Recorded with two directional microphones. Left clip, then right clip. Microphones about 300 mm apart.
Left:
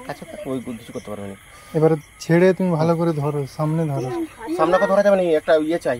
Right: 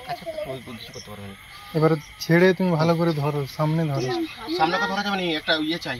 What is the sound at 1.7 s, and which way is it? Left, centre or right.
Speech, centre.